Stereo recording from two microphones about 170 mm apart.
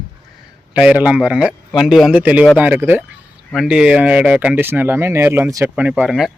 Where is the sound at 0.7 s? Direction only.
5° right (ahead or behind).